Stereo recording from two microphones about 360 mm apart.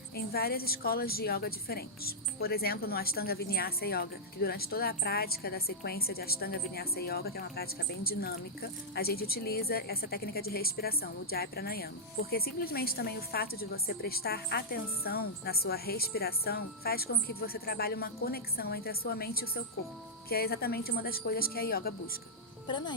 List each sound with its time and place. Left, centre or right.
0.3 s speech: left
22.6 s speech: centre